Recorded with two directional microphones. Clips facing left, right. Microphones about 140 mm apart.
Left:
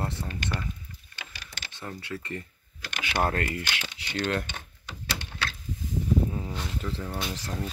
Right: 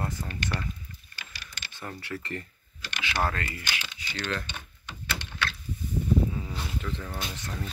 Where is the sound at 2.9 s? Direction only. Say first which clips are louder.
Left 2 dB; 55° left (ahead or behind).